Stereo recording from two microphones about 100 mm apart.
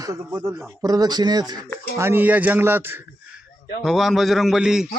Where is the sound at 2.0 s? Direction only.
20° right (ahead or behind).